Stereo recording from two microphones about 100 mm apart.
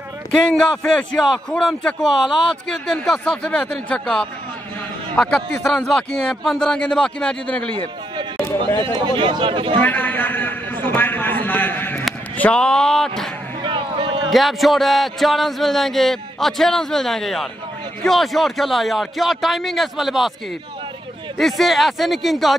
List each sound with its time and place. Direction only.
0.3 s a man's voice: 10° left (ahead or behind)
8.5 s speech: 25° left (ahead or behind)
8.9 s speech: 55° right (ahead or behind)
9.8 s a sound: 20° left (ahead or behind)
12.4 s a man's voice: 10° left (ahead or behind)
13.6 s a sound: 55° right (ahead or behind)
14.3 s speech: centre (ahead or behind)
21.4 s speech: centre (ahead or behind)